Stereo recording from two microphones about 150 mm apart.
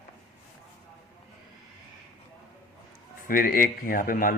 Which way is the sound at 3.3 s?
70° left (ahead or behind).